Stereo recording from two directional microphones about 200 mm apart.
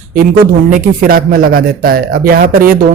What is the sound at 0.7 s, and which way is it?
Speech, 45° right (ahead or behind).